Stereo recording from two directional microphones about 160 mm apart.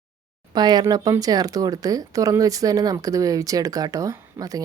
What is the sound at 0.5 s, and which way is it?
Speech, 25° right (ahead or behind).